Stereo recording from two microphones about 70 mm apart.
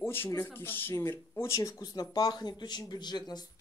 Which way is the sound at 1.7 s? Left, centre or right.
Left.